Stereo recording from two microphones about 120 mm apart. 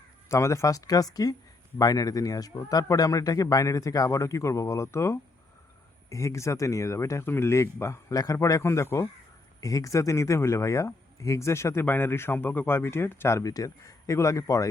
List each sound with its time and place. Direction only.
0.3 s speech: 25° left (ahead or behind)